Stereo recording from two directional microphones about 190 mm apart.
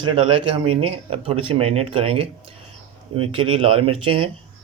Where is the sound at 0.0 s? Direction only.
25° right (ahead or behind).